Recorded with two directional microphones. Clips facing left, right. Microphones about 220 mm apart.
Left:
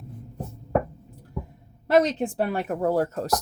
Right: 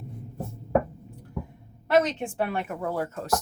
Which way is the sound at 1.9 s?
35° left (ahead or behind).